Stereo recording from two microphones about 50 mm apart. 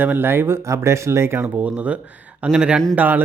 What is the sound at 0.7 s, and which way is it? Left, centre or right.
Speech, right.